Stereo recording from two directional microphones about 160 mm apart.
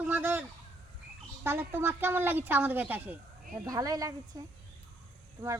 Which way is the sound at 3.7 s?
20° right (ahead or behind).